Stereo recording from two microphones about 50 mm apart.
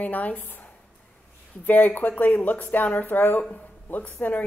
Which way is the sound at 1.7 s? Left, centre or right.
Left.